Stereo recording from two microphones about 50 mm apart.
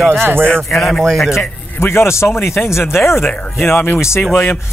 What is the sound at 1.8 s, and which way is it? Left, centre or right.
Speech, left.